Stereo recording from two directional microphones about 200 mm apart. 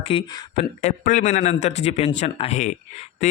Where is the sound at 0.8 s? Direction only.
40° left (ahead or behind).